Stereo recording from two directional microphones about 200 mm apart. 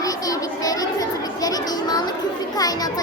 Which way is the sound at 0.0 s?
20° left (ahead or behind).